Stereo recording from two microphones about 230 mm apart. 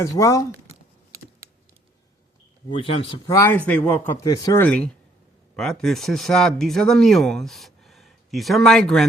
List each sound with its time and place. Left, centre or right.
0.0 s speech: centre
2.6 s speech: left; by 9.0 s centre